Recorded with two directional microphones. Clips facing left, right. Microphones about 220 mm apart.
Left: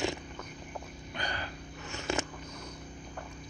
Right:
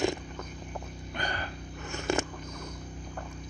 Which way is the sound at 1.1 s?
50° right (ahead or behind).